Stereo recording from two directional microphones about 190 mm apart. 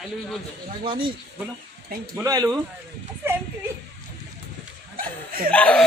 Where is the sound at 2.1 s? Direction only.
15° right (ahead or behind).